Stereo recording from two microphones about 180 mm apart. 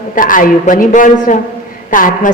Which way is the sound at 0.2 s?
50° left (ahead or behind).